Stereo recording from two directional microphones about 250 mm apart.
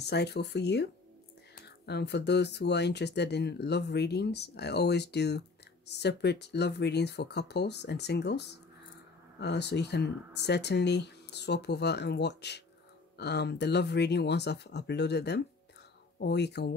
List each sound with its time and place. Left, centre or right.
0.0 s speech: left